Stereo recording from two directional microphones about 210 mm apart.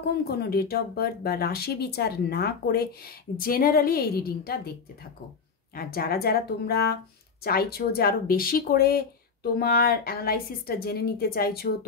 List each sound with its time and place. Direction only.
0.4 s speech: 45° left (ahead or behind)
5.8 s speech: 45° left (ahead or behind)